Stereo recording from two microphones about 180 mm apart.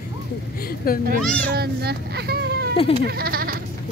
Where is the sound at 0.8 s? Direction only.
55° left (ahead or behind).